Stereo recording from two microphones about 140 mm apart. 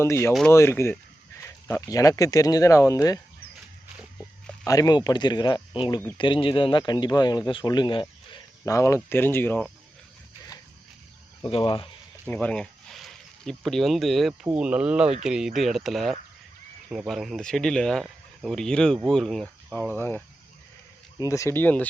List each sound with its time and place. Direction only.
0.0 s speech: 20° left (ahead or behind)
4.6 s speech: 25° left (ahead or behind)
8.6 s speech: 20° left (ahead or behind)
11.4 s speech: 40° left (ahead or behind)
12.2 s speech: 10° left (ahead or behind)
20.0 s speech: 15° left (ahead or behind)